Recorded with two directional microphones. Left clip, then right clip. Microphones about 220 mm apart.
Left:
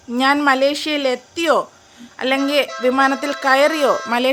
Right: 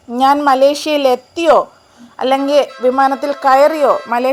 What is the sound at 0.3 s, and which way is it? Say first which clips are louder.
A woman's voice: right 5 dB; 5° left (ahead or behind).